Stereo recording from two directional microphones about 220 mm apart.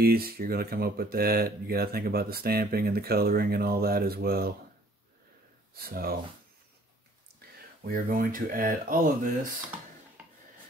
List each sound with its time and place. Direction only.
0.0 s speech: 45° right (ahead or behind)
5.8 s speech: 45° right (ahead or behind)
7.8 s speech: 40° right (ahead or behind)